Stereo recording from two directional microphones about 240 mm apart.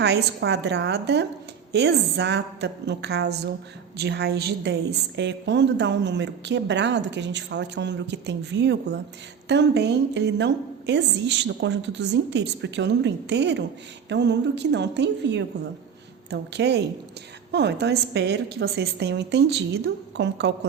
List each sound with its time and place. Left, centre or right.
0.0 s a woman's voice: right